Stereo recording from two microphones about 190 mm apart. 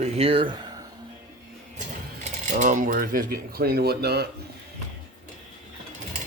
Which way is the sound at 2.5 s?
40° right (ahead or behind).